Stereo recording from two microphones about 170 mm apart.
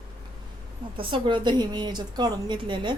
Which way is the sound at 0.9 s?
30° right (ahead or behind).